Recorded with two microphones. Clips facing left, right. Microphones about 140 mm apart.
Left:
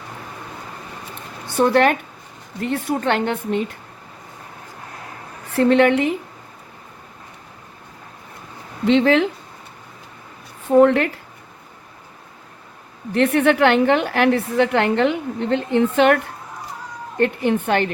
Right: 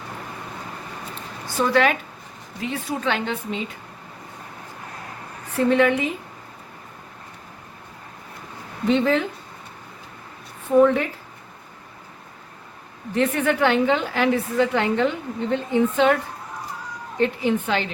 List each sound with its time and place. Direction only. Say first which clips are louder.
1.5 s a woman's voice: left 4 dB; 55° left (ahead or behind)
5.5 s a woman's voice: left 4 dB; 70° left (ahead or behind)
8.9 s speech: left 4 dB; 80° left
10.7 s a woman's voice: left 3 dB; 80° left
13.1 s a woman's voice: left 5 dB; 65° left (ahead or behind)